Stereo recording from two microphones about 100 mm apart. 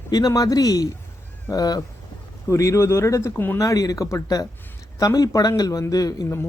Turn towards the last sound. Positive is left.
turn(degrees=35)  # may be behind; listen again after turning